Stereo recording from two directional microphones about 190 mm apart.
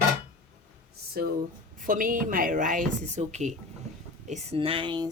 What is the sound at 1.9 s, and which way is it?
Speech, 45° right (ahead or behind).